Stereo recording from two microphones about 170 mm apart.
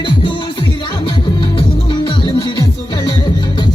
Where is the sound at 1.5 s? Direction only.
30° left (ahead or behind).